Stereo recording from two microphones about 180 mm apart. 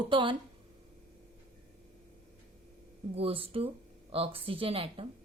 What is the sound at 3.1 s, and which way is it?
Speech, 30° right (ahead or behind).